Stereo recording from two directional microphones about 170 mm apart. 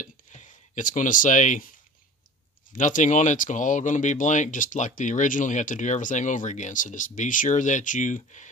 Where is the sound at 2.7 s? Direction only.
50° left (ahead or behind).